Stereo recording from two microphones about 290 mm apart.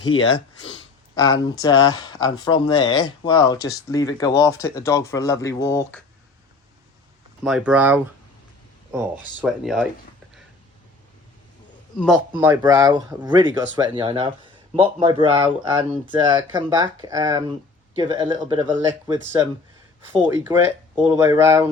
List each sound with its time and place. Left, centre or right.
0.3 s a sound: left
1.2 s speech: centre
7.4 s speech: centre
11.9 s speech: centre